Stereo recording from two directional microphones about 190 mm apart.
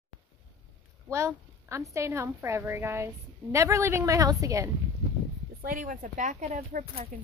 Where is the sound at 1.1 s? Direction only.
15° right (ahead or behind).